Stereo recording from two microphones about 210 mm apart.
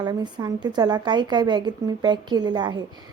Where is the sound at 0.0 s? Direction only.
20° right (ahead or behind).